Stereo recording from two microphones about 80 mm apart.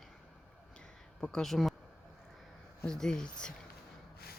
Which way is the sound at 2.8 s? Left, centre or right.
Centre.